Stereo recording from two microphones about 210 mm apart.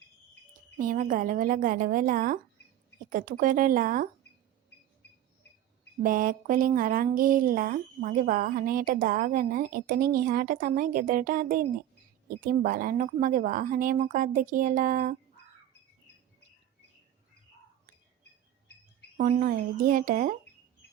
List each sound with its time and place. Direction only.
0.8 s speech: 40° right (ahead or behind)
6.0 s speech: 40° right (ahead or behind)
19.1 s speech: 35° right (ahead or behind)